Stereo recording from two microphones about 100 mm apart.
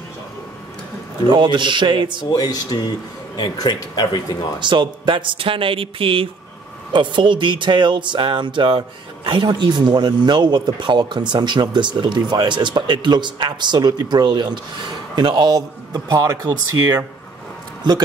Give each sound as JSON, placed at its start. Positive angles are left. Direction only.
{"t": 1.3, "sound": "speech", "side_deg": -50}
{"t": 2.3, "sound": "speech", "side_deg": 40}
{"t": 4.6, "sound": "speech", "side_deg": -50}
{"t": 6.9, "sound": "speech", "side_deg": -50}